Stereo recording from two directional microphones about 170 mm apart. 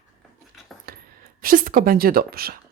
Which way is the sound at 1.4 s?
55° right (ahead or behind).